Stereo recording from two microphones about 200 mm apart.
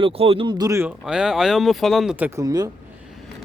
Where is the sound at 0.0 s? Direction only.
30° right (ahead or behind).